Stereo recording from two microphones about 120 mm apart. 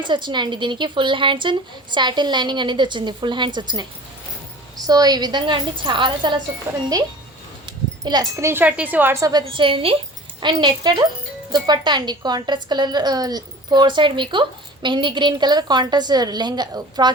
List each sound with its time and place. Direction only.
0.0 s a woman's voice: 40° right (ahead or behind)
4.9 s a woman's voice: 35° right (ahead or behind)
8.0 s speech: 35° right (ahead or behind)
8.4 s a woman's voice: 20° right (ahead or behind)
9.2 s a woman's voice: 40° right (ahead or behind)